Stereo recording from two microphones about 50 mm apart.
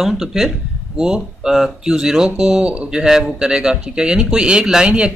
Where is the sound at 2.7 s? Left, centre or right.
Right.